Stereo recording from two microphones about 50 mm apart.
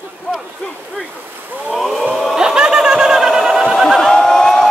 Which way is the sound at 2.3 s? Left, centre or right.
Centre.